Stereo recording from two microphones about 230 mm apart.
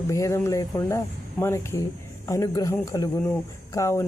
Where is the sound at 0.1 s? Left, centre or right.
Centre.